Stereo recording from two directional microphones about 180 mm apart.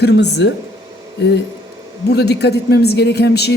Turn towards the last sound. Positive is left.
turn(degrees=65)  # may be behind; listen again after turning